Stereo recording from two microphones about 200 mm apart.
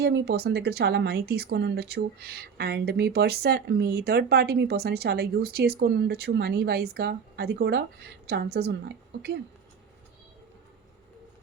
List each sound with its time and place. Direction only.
0.0 s speech: 55° right (ahead or behind)